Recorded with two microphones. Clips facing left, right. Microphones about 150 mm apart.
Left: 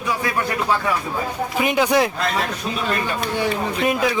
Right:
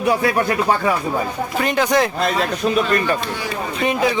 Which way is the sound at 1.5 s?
10° left (ahead or behind).